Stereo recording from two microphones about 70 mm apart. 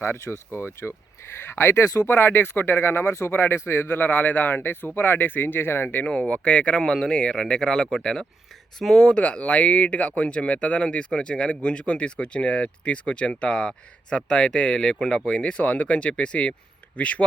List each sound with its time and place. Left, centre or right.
0.0 s speech: left
2.0 s speech: left; by 9.1 s centre
9.1 s speech: centre